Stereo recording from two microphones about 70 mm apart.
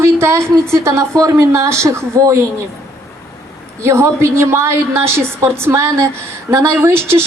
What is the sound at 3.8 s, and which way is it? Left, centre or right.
Speech, right.